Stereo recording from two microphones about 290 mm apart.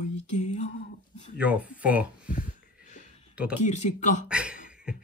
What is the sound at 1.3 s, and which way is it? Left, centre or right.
Speech, centre.